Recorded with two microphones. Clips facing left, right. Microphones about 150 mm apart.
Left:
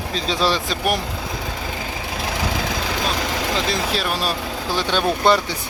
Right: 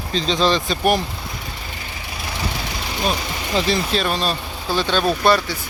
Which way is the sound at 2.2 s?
90° left.